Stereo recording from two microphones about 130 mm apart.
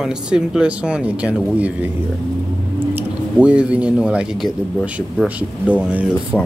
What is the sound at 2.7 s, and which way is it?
Speech, 10° right (ahead or behind).